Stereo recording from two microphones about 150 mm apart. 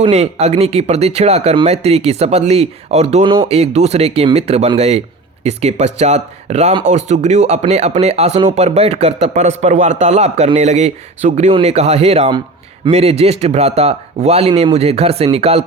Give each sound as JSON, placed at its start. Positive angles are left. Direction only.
{"t": 0.0, "sound": "speech", "side_deg": -45}